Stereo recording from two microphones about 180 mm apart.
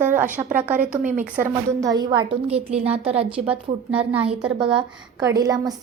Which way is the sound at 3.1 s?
35° right (ahead or behind).